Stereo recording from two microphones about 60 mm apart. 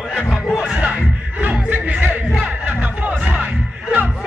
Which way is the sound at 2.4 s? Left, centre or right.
Right.